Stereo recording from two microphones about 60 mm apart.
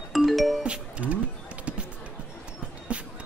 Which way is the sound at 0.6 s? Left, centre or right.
Centre.